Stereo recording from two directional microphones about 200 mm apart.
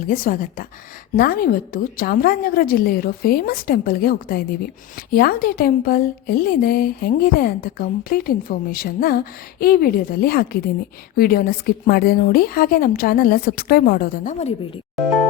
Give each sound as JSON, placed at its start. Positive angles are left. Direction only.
{"t": 0.1, "sound": "a woman's voice", "side_deg": 45}